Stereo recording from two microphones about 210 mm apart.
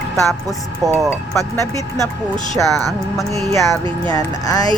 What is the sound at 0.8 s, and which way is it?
Speech, 15° right (ahead or behind).